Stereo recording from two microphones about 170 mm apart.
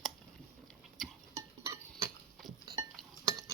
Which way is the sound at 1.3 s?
15° right (ahead or behind).